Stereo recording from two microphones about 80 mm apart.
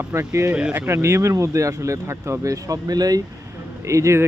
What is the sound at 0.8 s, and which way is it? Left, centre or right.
Speech, right.